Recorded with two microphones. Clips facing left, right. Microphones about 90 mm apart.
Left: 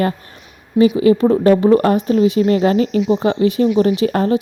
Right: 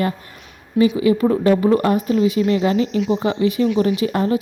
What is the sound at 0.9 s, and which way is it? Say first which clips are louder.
A woman's voice: left 4 dB; 30° left (ahead or behind).